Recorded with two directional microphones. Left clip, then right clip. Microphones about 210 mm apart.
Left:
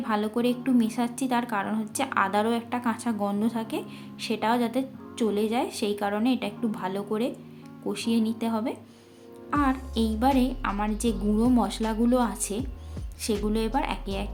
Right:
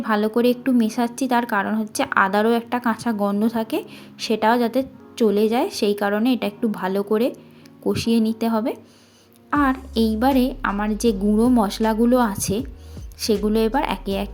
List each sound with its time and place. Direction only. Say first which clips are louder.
0.0 s a woman's voice: right 7 dB; 25° right (ahead or behind)